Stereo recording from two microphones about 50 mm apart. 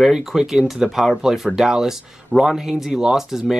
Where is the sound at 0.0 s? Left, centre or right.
Centre.